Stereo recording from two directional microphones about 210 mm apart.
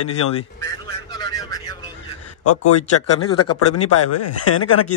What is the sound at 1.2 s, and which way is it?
Vehicle, 15° left (ahead or behind).